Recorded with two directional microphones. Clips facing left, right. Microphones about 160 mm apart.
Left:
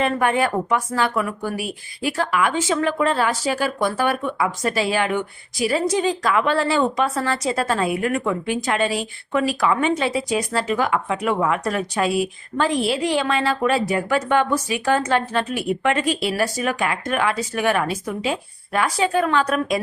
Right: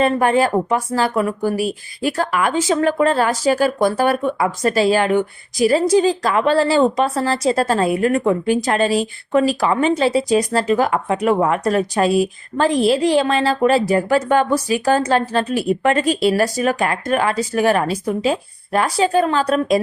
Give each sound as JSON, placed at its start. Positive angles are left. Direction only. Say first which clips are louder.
{"t": 0.0, "sound": "speech", "louder": "right 4 dB", "side_deg": -35}